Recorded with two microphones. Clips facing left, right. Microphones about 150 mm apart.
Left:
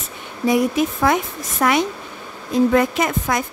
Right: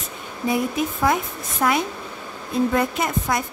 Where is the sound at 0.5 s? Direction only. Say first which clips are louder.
Left 5 dB; 90° left.